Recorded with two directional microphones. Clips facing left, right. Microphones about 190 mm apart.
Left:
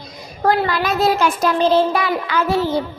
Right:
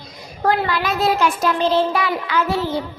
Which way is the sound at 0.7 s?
45° left (ahead or behind).